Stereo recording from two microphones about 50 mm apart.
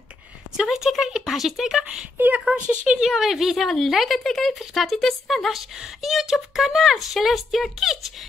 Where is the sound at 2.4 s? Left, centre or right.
Centre.